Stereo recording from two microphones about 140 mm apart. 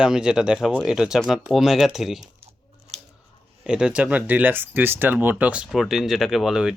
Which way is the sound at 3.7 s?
5° right (ahead or behind).